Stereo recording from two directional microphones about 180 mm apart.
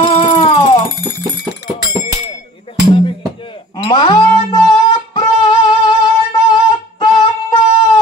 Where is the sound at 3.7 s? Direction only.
25° left (ahead or behind).